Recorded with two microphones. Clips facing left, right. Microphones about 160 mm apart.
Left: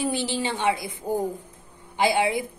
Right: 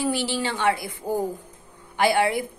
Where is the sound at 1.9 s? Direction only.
15° left (ahead or behind).